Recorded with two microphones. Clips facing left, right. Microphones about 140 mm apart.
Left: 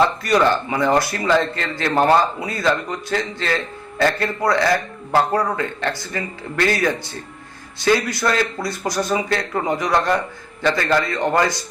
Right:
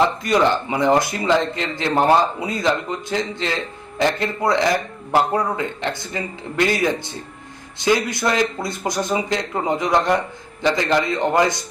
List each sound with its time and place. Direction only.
0.0 s a man's voice: 20° right (ahead or behind)